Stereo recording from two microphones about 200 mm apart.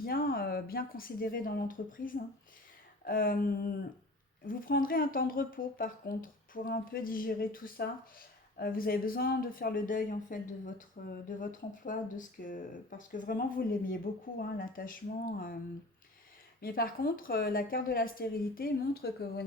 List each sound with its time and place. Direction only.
0.0 s speech: 50° left (ahead or behind)
16.6 s speech: 45° left (ahead or behind)